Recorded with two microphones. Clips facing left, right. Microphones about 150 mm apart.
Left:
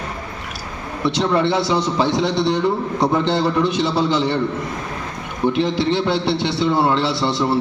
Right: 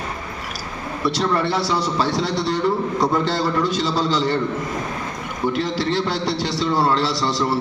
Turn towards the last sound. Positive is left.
turn(degrees=25)  # may be behind; listen again after turning